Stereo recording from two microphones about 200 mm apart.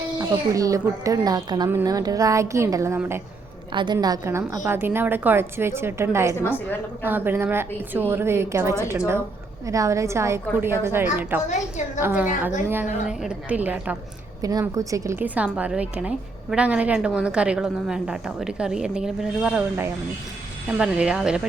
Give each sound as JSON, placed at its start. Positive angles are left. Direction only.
{"t": 0.2, "sound": "speech", "side_deg": -15}
{"t": 3.7, "sound": "a woman's voice", "side_deg": -25}